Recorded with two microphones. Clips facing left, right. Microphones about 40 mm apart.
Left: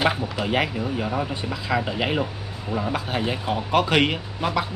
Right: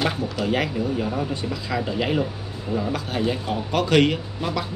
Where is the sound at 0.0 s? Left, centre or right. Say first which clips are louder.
Left 1 dB; centre.